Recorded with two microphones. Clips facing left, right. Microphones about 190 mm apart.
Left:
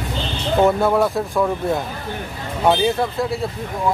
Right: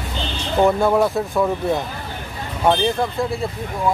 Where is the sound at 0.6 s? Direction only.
Centre (ahead or behind).